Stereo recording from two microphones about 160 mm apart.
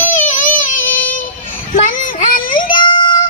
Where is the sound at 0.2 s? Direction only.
55° left (ahead or behind).